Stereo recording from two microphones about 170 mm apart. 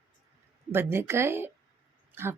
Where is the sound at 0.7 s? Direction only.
15° right (ahead or behind).